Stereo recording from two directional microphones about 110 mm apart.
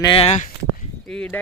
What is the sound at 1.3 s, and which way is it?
Speech, 15° left (ahead or behind).